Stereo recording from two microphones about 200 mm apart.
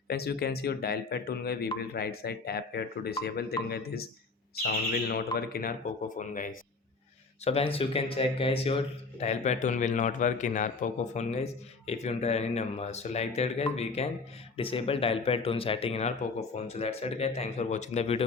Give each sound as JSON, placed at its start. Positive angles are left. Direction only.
{"t": 0.1, "sound": "speech", "side_deg": 55}
{"t": 7.4, "sound": "speech", "side_deg": 30}